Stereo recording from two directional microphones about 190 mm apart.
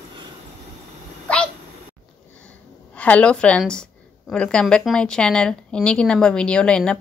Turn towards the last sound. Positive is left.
turn(degrees=5)  # may be behind; listen again after turning